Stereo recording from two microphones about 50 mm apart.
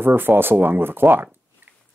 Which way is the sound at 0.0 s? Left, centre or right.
Right.